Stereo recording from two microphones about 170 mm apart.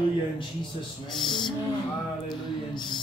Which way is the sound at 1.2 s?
25° left (ahead or behind).